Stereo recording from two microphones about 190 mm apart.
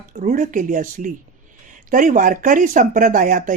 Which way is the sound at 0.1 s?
40° right (ahead or behind).